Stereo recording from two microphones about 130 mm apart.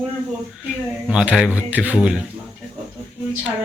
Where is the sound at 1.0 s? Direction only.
5° right (ahead or behind).